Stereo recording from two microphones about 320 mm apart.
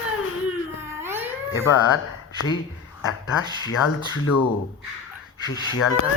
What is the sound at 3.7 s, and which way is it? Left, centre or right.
Speech, left.